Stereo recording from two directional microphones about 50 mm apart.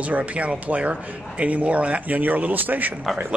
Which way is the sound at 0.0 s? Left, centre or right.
Right.